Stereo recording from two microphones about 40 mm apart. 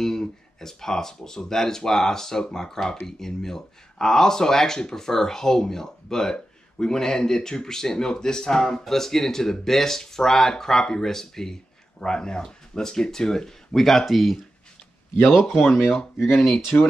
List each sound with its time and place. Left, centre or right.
0.0 s speech: centre
16.3 s speech: centre